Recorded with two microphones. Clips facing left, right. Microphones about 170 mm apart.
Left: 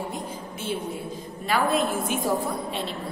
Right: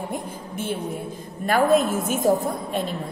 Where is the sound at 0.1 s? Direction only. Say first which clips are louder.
Right 3 dB; 55° right (ahead or behind).